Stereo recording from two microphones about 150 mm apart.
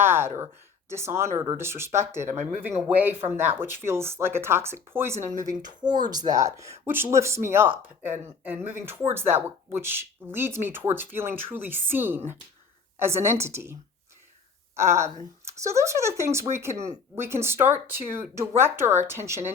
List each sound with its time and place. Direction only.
0.0 s speech: 15° right (ahead or behind)
5.8 s speech: 30° right (ahead or behind)
14.8 s speech: 20° right (ahead or behind)
16.7 s speech: 45° right (ahead or behind)
17.2 s speech: 15° right (ahead or behind)